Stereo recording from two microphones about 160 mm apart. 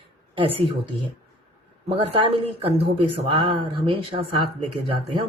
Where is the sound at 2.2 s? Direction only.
35° right (ahead or behind).